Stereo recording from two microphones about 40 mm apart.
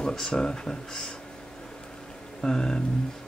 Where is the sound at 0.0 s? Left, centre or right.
Centre.